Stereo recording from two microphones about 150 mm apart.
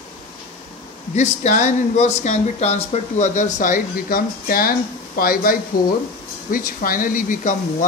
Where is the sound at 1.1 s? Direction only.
50° left (ahead or behind).